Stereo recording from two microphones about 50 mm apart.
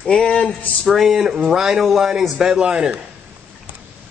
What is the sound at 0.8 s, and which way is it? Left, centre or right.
Speech, centre.